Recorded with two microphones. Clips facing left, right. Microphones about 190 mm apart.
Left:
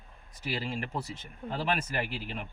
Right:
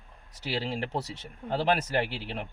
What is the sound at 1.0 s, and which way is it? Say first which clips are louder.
Speech: right 3 dB; 80° right.